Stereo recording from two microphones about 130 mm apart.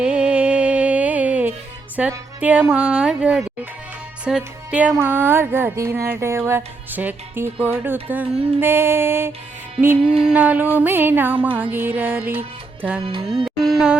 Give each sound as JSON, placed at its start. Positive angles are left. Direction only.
{"t": 0.0, "sound": "music", "side_deg": -10}
{"t": 2.0, "sound": "speech", "side_deg": -10}
{"t": 4.3, "sound": "music", "side_deg": -10}
{"t": 4.9, "sound": "speech", "side_deg": -15}
{"t": 13.0, "sound": "music", "side_deg": -40}
{"t": 13.2, "sound": "music", "side_deg": -5}